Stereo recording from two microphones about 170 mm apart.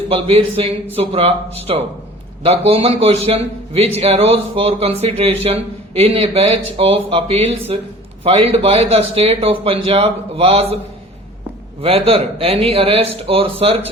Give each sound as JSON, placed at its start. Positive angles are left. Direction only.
{"t": 0.1, "sound": "speech", "side_deg": -35}
{"t": 11.8, "sound": "speech", "side_deg": -35}